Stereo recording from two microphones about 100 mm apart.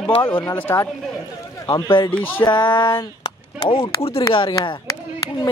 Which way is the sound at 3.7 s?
75° left (ahead or behind).